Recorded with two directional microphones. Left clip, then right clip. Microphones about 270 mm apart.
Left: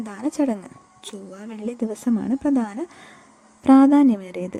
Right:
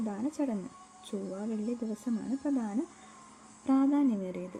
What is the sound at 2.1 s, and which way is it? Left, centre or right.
A woman's voice, left.